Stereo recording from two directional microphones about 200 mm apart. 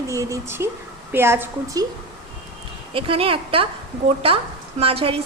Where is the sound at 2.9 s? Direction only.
25° right (ahead or behind).